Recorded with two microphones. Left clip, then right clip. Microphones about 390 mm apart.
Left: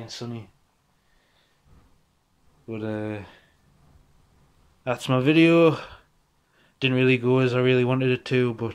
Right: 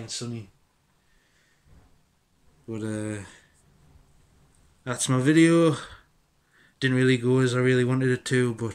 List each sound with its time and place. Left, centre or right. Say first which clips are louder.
0.0 s speech: right 1 dB; centre
2.7 s speech: left 2 dB; centre
4.8 s speech: left 2 dB; centre